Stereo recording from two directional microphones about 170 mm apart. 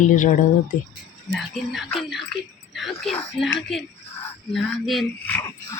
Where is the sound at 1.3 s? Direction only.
Centre (ahead or behind).